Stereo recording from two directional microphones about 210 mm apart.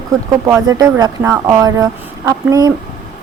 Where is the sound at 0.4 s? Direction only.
15° right (ahead or behind).